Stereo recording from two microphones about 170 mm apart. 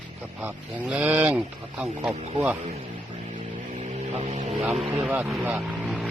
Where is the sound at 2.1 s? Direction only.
35° right (ahead or behind).